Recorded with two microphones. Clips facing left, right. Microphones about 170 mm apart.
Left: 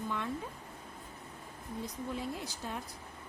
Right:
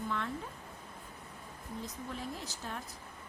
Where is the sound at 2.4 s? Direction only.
15° left (ahead or behind).